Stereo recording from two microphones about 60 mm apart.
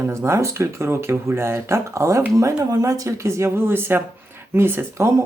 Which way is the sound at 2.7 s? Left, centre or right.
Right.